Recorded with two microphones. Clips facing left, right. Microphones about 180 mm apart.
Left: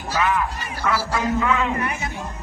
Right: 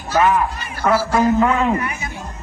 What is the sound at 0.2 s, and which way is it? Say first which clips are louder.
A man's voice: right 6 dB; 45° right (ahead or behind).